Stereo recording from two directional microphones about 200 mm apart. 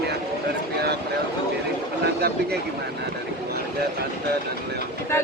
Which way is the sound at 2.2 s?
50° right (ahead or behind).